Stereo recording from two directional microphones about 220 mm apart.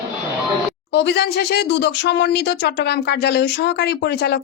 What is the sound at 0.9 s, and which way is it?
Speech, 50° left (ahead or behind).